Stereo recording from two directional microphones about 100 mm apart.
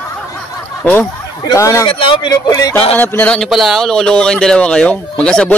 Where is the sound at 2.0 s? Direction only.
60° left (ahead or behind).